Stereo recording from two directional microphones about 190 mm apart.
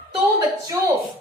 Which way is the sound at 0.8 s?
10° right (ahead or behind).